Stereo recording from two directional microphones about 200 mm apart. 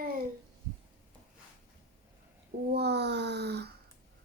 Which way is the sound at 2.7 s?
55° right (ahead or behind).